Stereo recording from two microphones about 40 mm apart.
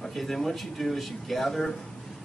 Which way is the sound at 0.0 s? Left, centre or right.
Centre.